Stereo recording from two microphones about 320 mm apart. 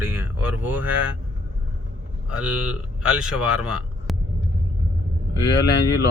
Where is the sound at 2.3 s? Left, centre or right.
Centre.